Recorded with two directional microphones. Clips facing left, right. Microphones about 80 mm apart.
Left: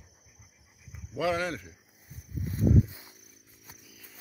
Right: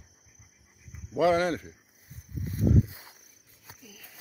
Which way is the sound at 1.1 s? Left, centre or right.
Right.